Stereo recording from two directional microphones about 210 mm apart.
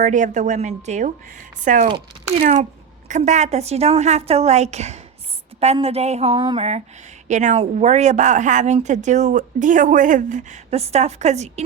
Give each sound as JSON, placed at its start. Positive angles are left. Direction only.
{"t": 0.0, "sound": "a woman's voice", "side_deg": -35}